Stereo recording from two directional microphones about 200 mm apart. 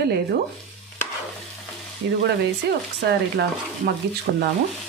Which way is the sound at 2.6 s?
55° right (ahead or behind).